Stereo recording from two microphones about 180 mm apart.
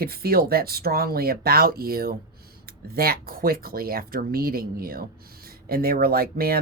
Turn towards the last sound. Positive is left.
turn(degrees=-55)  # may be behind; listen again after turning